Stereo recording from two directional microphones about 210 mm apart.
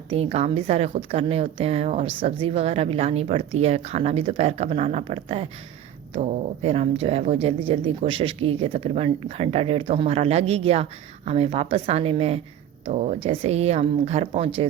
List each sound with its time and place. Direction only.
0.1 s speech: 30° right (ahead or behind)